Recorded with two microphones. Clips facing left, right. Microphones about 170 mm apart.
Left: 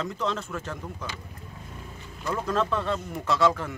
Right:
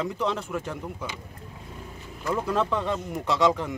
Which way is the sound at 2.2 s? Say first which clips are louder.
Right 1 dB; 10° right (ahead or behind).